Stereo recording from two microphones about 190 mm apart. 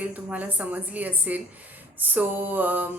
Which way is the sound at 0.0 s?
10° right (ahead or behind).